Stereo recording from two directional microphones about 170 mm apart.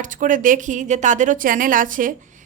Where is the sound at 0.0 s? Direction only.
50° right (ahead or behind).